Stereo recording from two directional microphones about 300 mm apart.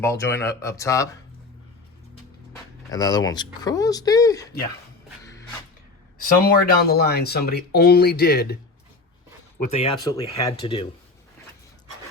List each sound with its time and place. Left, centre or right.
0.0 s speech: centre
2.9 s speech: centre
6.4 s speech: left
9.6 s speech: centre